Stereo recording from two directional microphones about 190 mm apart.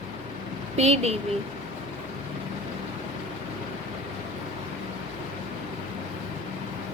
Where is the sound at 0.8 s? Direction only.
35° right (ahead or behind).